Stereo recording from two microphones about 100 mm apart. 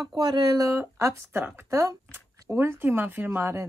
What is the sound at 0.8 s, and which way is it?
Speech, 20° right (ahead or behind).